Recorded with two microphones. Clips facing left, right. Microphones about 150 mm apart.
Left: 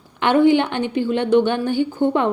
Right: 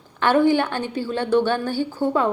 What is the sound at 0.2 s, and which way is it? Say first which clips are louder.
Speech: left 3 dB; 20° left (ahead or behind).